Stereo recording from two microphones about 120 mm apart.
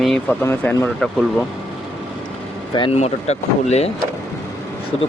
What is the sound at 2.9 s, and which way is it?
Speech, 65° left (ahead or behind).